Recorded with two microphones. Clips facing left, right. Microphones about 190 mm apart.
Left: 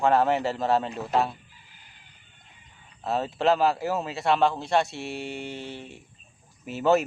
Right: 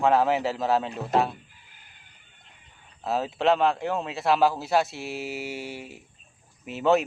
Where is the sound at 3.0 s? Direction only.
Centre (ahead or behind).